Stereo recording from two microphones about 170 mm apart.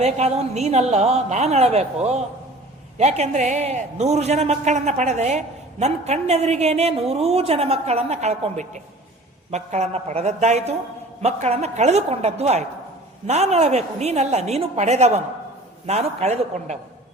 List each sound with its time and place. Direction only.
0.0 s a woman's voice: 40° right (ahead or behind)